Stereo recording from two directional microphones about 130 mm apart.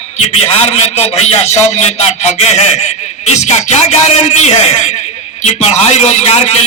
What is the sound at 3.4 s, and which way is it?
A man's voice, 60° left (ahead or behind).